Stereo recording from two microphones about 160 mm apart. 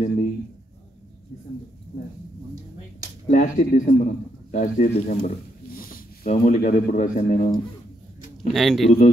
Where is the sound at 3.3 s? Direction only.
45° left (ahead or behind).